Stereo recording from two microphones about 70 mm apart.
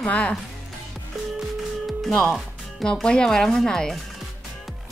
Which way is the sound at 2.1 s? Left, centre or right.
Centre.